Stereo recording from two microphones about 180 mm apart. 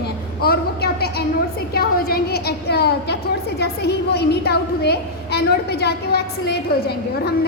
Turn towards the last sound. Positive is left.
turn(degrees=65)  # may be behind; listen again after turning